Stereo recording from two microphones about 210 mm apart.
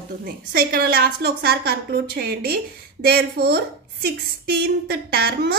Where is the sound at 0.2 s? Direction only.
45° right (ahead or behind).